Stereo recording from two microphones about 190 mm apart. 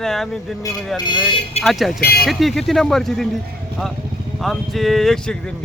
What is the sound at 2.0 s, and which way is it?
Speech, 55° left (ahead or behind).